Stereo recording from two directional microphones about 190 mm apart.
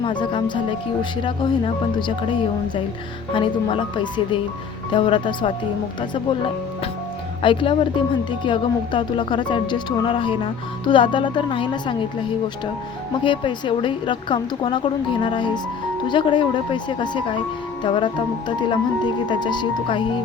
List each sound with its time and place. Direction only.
0.0 s speech: 25° left (ahead or behind)
3.3 s speech: 25° left (ahead or behind)
7.4 s speech: 25° left (ahead or behind)
13.2 s speech: 25° left (ahead or behind)